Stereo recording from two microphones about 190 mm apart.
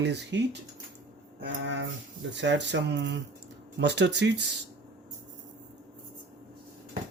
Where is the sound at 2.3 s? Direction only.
70° right (ahead or behind).